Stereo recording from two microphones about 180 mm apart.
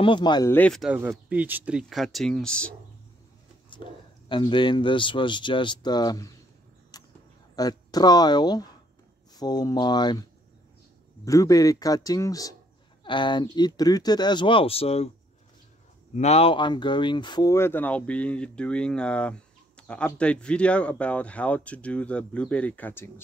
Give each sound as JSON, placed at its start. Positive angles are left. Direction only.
{"t": 0.0, "sound": "speech", "side_deg": 25}
{"t": 0.5, "sound": "speech", "side_deg": 5}
{"t": 0.8, "sound": "speech", "side_deg": -10}
{"t": 3.7, "sound": "speech", "side_deg": 25}
{"t": 6.9, "sound": "a sound", "side_deg": 20}
{"t": 7.5, "sound": "speech", "side_deg": 20}
{"t": 11.2, "sound": "speech", "side_deg": 20}
{"t": 16.2, "sound": "speech", "side_deg": 35}